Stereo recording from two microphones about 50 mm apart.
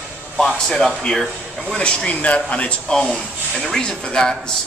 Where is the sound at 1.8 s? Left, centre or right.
Left.